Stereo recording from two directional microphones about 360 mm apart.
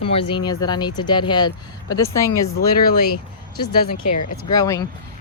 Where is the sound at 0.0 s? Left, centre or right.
Centre.